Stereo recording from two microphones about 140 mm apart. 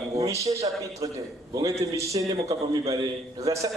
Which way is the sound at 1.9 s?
25° right (ahead or behind).